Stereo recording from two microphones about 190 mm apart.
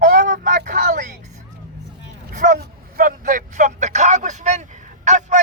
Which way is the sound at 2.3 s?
45° right (ahead or behind).